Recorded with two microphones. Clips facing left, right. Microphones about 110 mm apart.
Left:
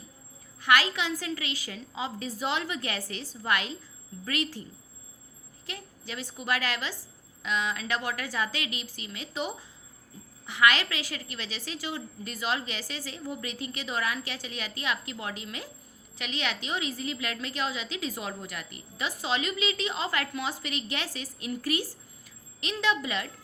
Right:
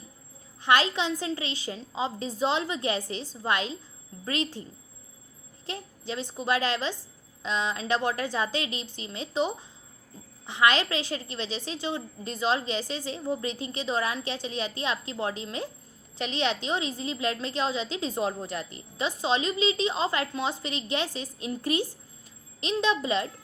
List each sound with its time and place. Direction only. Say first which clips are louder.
0.6 s a woman's voice: right 2 dB; 25° right (ahead or behind)
5.6 s a woman's voice: right 6 dB; 25° right (ahead or behind)